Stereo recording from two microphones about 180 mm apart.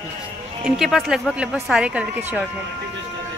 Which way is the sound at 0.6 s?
5° right (ahead or behind).